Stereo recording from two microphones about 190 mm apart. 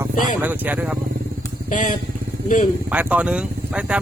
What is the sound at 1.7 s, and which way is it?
Speech, 40° left (ahead or behind).